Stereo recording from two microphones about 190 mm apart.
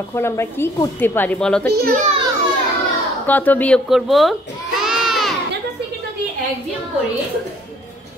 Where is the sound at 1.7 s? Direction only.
45° right (ahead or behind).